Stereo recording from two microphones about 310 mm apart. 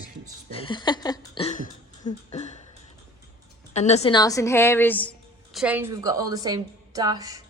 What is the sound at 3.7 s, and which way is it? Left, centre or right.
A woman's voice, left.